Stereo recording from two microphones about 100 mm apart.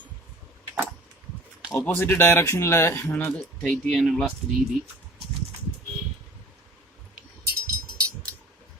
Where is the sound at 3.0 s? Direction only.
15° left (ahead or behind).